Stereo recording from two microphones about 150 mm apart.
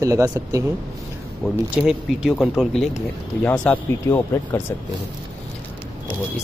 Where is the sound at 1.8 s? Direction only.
5° right (ahead or behind).